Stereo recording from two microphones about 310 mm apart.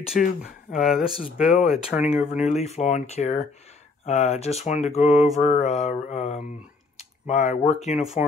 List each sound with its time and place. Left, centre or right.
0.2 s speech: left
0.7 s speech: centre
2.3 s speech: left